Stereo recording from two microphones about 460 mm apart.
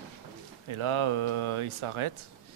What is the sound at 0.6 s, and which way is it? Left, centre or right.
Speech, right.